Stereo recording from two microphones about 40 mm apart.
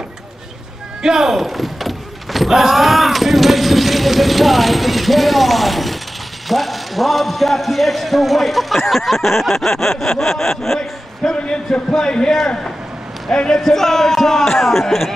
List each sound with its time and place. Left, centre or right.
1.0 s vehicle: centre
6.5 s a man's voice: centre
10.8 s a man's voice: centre